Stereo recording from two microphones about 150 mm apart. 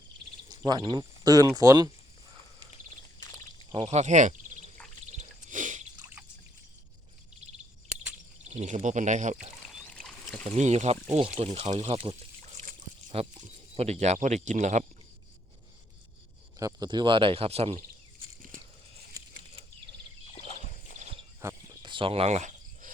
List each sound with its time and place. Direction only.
0.6 s speech: 30° right (ahead or behind)
3.2 s a sound: 20° left (ahead or behind)
3.7 s speech: 40° right (ahead or behind)
5.1 s a sound: 60° right (ahead or behind)
8.4 s speech: 55° right (ahead or behind)
9.6 s boat: centre (ahead or behind)
10.4 s speech: 50° right (ahead or behind)
11.8 s speech: 35° right (ahead or behind)
13.1 s speech: 40° right (ahead or behind)
16.6 s speech: 25° right (ahead or behind); by 17.7 s 40° right (ahead or behind)
21.4 s cricket: 20° right (ahead or behind)
21.8 s cricket: 30° right (ahead or behind); by 22.9 s 50° right (ahead or behind)